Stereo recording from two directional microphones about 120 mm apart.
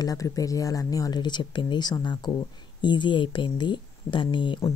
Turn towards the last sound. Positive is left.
turn(degrees=40)  # may be behind; listen again after turning